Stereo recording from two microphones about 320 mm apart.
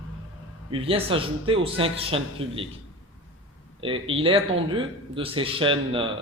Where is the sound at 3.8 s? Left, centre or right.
Centre.